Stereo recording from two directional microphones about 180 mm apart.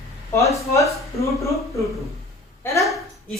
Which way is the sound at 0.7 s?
15° left (ahead or behind).